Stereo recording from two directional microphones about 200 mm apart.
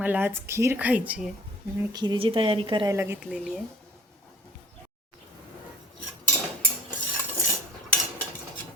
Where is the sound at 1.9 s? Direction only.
20° right (ahead or behind).